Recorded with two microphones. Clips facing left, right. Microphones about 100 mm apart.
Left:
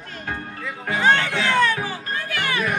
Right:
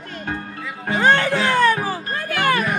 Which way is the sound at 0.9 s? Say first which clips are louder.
Right 3 dB; 40° right (ahead or behind).